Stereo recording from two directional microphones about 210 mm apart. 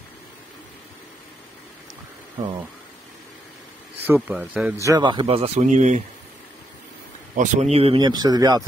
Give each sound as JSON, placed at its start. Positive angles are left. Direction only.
{"t": 4.0, "sound": "speech", "side_deg": -10}
{"t": 4.8, "sound": "speech", "side_deg": -20}
{"t": 7.3, "sound": "speech", "side_deg": -35}